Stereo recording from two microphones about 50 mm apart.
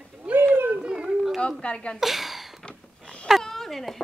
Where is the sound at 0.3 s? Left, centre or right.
Right.